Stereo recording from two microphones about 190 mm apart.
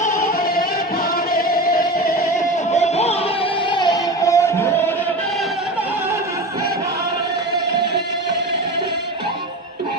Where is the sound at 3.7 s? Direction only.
20° left (ahead or behind).